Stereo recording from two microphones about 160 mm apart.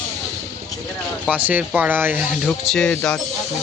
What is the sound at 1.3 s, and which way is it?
Speech, 10° right (ahead or behind).